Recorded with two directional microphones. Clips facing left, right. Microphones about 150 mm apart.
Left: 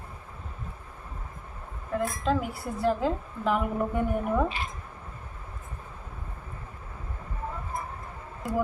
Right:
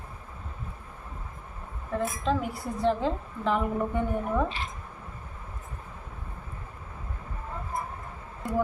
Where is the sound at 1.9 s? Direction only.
Centre (ahead or behind).